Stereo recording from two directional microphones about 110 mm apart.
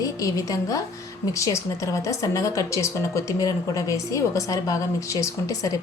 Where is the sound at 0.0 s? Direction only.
30° left (ahead or behind).